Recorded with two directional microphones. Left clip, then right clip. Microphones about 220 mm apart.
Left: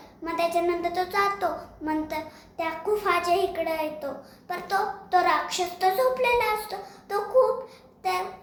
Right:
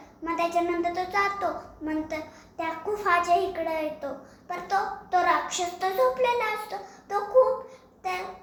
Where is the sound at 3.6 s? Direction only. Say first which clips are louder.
Left 2 dB; 20° left (ahead or behind).